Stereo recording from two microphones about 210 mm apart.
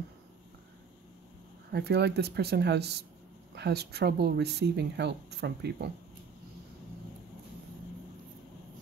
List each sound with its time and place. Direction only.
1.7 s speech: 50° right (ahead or behind)